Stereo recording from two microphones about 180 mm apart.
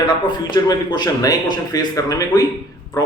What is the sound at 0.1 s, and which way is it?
Speech, 25° left (ahead or behind).